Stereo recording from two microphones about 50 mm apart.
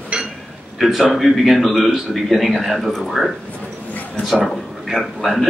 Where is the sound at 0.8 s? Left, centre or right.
Centre.